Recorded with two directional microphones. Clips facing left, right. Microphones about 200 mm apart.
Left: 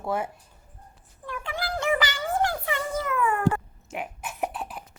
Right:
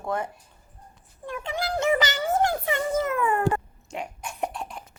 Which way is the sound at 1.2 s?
20° right (ahead or behind).